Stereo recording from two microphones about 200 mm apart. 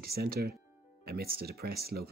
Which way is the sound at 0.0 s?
50° right (ahead or behind).